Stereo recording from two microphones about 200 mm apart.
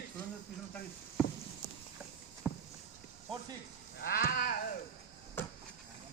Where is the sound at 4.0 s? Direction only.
50° left (ahead or behind).